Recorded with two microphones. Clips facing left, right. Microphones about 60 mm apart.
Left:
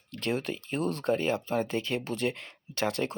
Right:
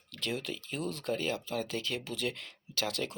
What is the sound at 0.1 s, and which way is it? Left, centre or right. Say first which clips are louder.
Speech: left 5 dB; left.